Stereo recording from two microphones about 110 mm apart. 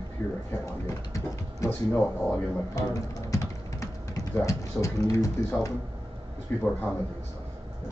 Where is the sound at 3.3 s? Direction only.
30° left (ahead or behind).